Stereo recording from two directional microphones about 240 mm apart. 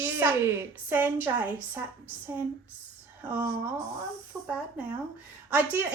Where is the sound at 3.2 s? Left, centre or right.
Centre.